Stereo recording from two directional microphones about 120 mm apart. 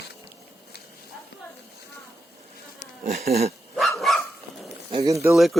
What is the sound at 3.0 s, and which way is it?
Bee, 60° right (ahead or behind).